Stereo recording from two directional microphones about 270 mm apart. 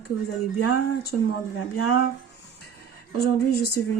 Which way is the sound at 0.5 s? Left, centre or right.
Left.